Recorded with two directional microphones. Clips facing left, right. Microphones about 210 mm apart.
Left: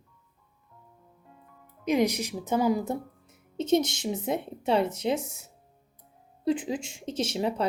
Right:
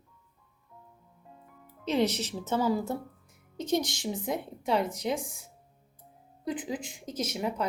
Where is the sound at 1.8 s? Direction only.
10° left (ahead or behind); by 7.7 s 30° left (ahead or behind).